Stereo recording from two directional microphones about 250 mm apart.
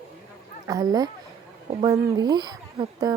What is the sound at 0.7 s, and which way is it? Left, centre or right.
Speech, centre.